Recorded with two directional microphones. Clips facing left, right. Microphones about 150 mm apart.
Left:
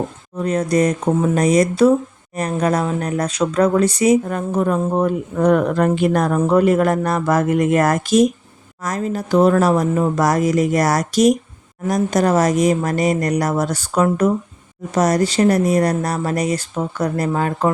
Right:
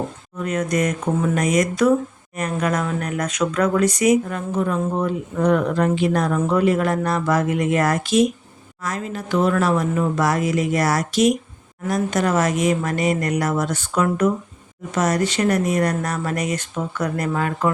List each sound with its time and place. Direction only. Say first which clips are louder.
0.3 s speech: left 4 dB; 35° left (ahead or behind)
4.3 s speech: left 4 dB; 40° left (ahead or behind)